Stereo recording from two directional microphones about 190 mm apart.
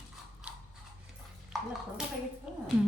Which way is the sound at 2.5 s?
5° right (ahead or behind).